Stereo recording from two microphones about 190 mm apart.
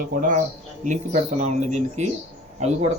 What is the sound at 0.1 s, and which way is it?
Speech, 45° right (ahead or behind).